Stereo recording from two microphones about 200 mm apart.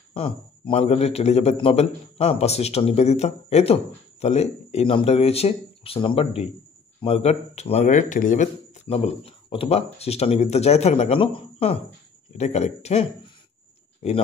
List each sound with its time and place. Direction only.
0.1 s a man's voice: 25° left (ahead or behind)